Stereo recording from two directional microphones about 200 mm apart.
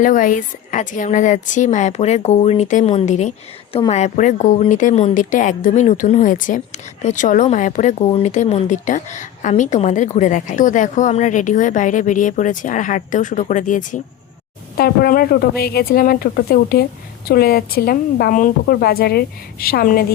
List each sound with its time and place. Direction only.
0.0 s a woman's voice: 40° left (ahead or behind)